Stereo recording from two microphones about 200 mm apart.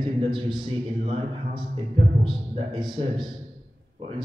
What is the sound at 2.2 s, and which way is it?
A man's voice, 25° right (ahead or behind).